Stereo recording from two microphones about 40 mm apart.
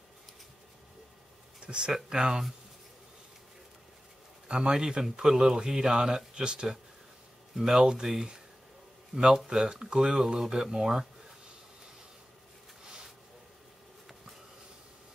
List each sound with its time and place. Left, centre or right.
1.6 s speech: right
4.5 s speech: right
7.5 s speech: centre
12.8 s a sound: centre